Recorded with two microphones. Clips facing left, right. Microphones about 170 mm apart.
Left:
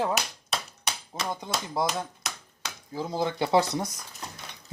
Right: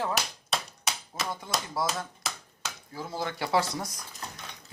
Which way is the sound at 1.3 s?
20° left (ahead or behind).